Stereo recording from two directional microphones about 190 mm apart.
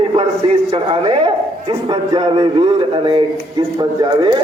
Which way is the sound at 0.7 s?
30° right (ahead or behind).